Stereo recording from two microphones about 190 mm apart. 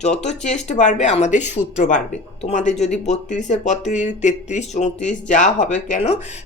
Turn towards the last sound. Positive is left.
turn(degrees=40)  # may be behind; listen again after turning